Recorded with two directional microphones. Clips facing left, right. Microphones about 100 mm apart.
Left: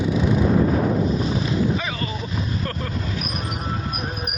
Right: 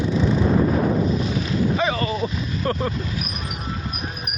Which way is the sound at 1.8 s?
35° right (ahead or behind).